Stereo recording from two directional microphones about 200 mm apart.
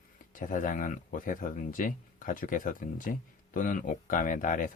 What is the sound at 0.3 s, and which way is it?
Speech, 40° left (ahead or behind).